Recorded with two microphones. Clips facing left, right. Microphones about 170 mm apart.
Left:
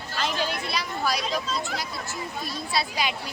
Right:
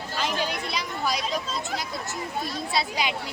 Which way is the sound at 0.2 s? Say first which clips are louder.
Even; 15° right (ahead or behind).